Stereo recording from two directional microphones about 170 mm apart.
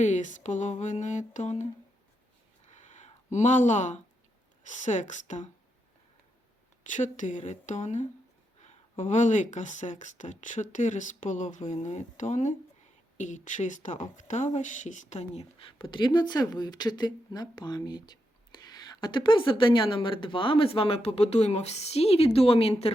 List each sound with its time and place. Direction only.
0.0 s speech: 45° left (ahead or behind)
2.6 s a sound: 45° left (ahead or behind)
4.6 s speech: 45° left (ahead or behind)
6.8 s speech: 50° left (ahead or behind)